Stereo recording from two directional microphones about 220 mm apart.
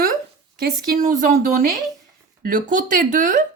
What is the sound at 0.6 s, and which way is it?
A woman's voice, 35° right (ahead or behind).